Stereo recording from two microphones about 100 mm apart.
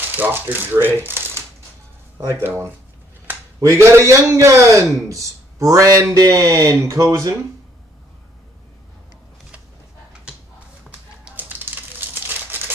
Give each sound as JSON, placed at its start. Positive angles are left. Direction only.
{"t": 0.1, "sound": "speech", "side_deg": -20}
{"t": 2.4, "sound": "speech", "side_deg": -20}
{"t": 11.2, "sound": "crumpling", "side_deg": -20}